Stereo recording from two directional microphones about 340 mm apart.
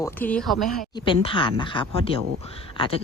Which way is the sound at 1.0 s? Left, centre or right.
Centre.